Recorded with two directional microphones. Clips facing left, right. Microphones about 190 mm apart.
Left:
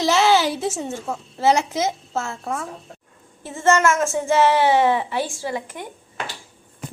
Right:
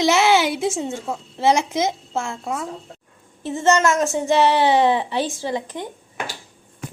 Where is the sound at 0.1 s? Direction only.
15° right (ahead or behind).